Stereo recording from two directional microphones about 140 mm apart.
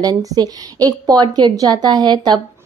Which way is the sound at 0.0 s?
25° right (ahead or behind).